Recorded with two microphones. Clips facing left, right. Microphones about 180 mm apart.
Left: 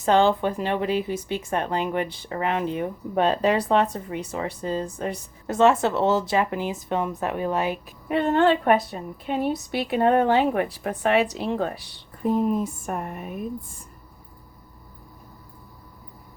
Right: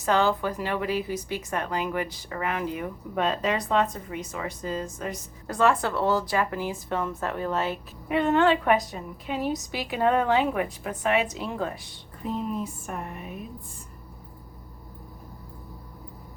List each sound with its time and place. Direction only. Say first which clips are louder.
0.0 s a woman's voice: left 4 dB; 25° left (ahead or behind)
8.0 s a woman's voice: left 2 dB; 35° left (ahead or behind)
12.2 s speech: left 7 dB; 50° left (ahead or behind)